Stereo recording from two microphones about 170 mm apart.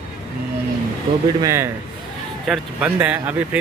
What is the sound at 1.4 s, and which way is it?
Speech, 15° right (ahead or behind).